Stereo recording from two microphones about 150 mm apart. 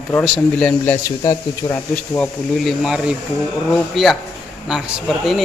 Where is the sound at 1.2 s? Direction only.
25° left (ahead or behind).